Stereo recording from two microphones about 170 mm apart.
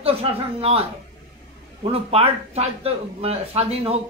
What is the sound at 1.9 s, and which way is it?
Speech, 35° right (ahead or behind).